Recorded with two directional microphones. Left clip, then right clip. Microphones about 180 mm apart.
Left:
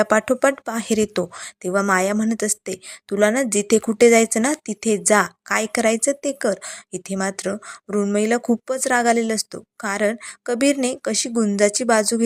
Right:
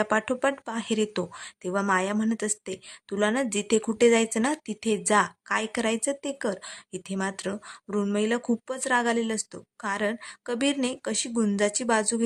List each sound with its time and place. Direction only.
0.0 s speech: 15° left (ahead or behind)